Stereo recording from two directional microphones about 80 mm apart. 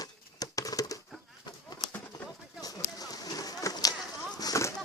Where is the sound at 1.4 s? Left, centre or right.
Left.